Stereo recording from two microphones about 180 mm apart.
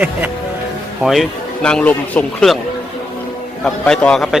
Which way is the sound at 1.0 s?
Centre (ahead or behind).